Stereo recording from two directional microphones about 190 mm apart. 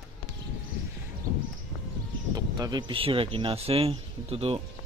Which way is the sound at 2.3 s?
20° right (ahead or behind).